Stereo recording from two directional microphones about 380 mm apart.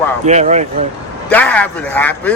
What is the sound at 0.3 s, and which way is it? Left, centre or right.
Speech, centre.